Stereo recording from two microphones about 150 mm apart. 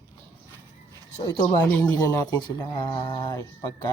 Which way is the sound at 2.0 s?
25° left (ahead or behind).